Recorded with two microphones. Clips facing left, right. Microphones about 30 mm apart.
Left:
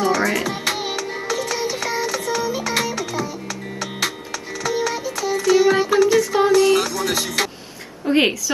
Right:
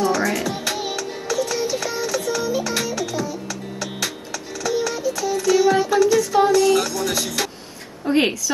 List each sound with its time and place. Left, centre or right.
0.2 s music: left
0.5 s music: left
2.5 s music: left
4.8 s music: left
8.1 s speech: centre